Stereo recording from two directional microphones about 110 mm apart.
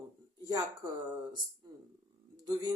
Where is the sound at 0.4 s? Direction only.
35° right (ahead or behind).